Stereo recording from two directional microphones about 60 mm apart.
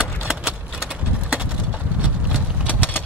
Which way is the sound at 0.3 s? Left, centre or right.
Centre.